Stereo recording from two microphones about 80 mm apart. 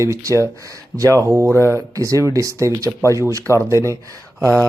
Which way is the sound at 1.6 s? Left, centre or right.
Right.